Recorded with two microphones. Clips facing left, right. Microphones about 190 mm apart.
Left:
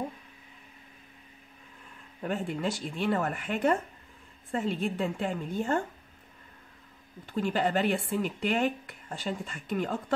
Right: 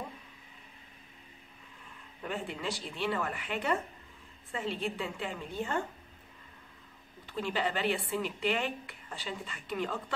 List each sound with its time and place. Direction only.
2.2 s speech: 45° left (ahead or behind)
7.2 s speech: 45° left (ahead or behind)